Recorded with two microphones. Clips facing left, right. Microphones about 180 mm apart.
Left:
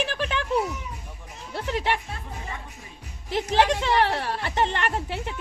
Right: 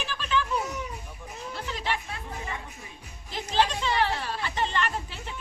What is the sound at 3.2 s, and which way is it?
A woman's voice, 70° left (ahead or behind).